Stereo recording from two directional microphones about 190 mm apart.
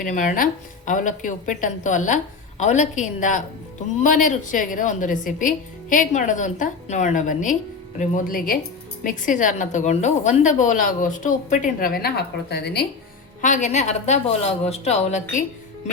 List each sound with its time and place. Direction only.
0.0 s a woman's voice: 45° left (ahead or behind); by 12.8 s 60° left (ahead or behind)
13.4 s a woman's voice: 40° left (ahead or behind)